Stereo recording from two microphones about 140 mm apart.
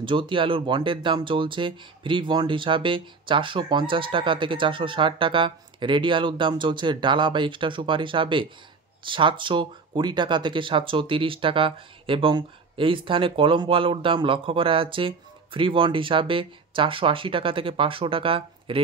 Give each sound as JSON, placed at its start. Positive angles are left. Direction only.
{"t": 0.0, "sound": "speech", "side_deg": -35}